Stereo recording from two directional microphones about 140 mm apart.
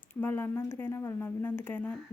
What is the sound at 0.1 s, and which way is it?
Speech, 15° left (ahead or behind).